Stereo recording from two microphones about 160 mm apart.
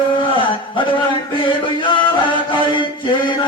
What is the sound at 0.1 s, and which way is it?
A man's voice, 30° left (ahead or behind).